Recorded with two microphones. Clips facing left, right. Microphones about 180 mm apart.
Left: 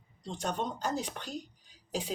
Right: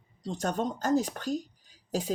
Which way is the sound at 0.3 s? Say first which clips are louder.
Right 4 dB; 45° right (ahead or behind).